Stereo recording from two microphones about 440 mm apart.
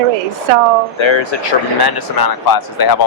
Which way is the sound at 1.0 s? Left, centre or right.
Left.